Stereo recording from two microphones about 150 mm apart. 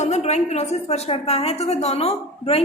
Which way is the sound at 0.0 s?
45° left (ahead or behind).